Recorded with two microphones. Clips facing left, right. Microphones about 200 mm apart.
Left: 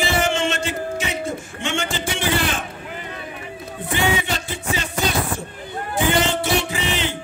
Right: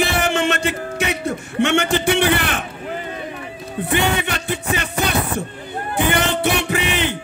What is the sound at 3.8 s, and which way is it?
Music, 65° right (ahead or behind).